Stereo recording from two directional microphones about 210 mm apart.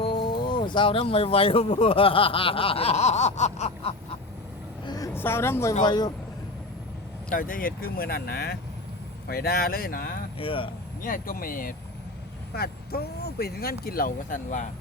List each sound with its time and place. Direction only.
0.0 s a sound: 25° left (ahead or behind)
0.4 s speech: 20° left (ahead or behind)
4.9 s speech: 15° left (ahead or behind)
7.3 s speech: 40° left (ahead or behind)
10.3 s speech: 25° left (ahead or behind)
11.0 s speech: 40° left (ahead or behind)